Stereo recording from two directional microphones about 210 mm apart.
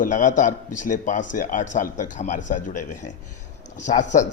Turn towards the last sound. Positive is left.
turn(degrees=35)  # may be behind; listen again after turning